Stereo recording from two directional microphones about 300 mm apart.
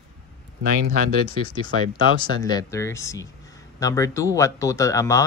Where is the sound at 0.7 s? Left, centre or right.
Right.